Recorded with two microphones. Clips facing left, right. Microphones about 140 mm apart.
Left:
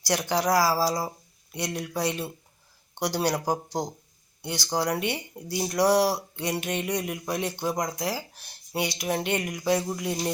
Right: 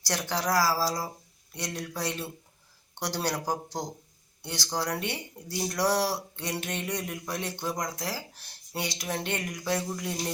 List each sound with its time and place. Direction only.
0.0 s speech: 15° left (ahead or behind)